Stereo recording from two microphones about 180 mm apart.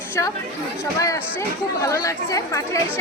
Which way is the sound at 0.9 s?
20° left (ahead or behind).